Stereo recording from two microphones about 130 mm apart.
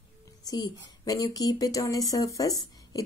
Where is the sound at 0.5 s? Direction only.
30° left (ahead or behind).